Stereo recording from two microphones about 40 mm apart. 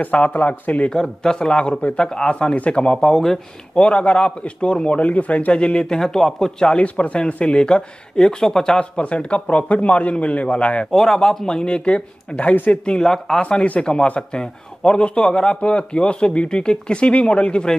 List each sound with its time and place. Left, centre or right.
0.0 s a man's voice: left
0.9 s speech: centre
3.1 s speech: centre
3.7 s a man's voice: left
5.5 s speech: left
6.6 s speech: left
8.9 s speech: left
10.9 s speech: centre; by 12.5 s left
13.0 s speech: centre
13.4 s a man's voice: left
14.4 s a man's voice: centre
15.0 s speech: left